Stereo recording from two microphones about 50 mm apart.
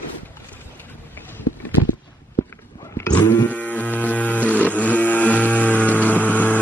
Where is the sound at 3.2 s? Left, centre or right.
Left.